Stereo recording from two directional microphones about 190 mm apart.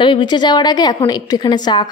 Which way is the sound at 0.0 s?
25° left (ahead or behind).